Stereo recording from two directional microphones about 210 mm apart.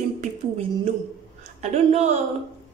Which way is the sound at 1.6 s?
30° right (ahead or behind).